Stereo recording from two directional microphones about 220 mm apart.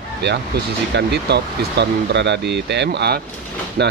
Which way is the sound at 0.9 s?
50° right (ahead or behind).